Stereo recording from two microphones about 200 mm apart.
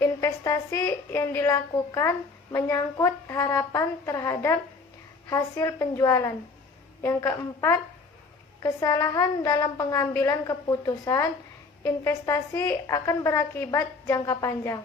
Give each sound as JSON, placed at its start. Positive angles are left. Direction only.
{"t": 0.0, "sound": "a woman's voice", "side_deg": 15}